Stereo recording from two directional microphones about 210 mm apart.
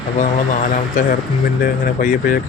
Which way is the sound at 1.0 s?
35° left (ahead or behind).